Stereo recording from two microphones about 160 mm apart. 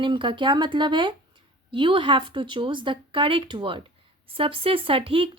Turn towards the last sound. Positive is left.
turn(degrees=-35)  # may be behind; listen again after turning